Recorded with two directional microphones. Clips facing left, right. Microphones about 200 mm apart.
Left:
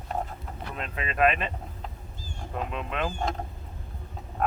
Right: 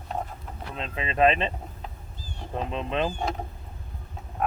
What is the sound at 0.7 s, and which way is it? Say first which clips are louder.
Speech: right 2 dB; 25° right (ahead or behind).